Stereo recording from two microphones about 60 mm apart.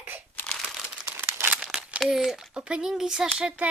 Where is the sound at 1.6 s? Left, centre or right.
Centre.